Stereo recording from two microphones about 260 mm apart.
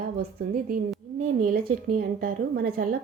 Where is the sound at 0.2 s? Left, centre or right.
Right.